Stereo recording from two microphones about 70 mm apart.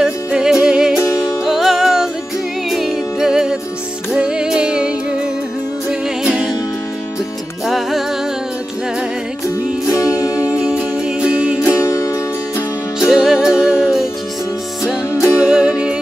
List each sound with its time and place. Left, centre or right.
0.0 s music: centre
7.6 s music: centre
9.8 s music: left
10.4 s music: centre
11.6 s music: left
13.0 s music: centre
15.3 s music: centre